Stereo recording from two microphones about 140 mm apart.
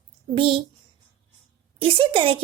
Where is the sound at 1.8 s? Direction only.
40° right (ahead or behind).